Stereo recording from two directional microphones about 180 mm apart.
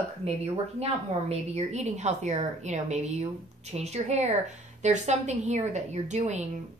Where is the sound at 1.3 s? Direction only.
35° right (ahead or behind).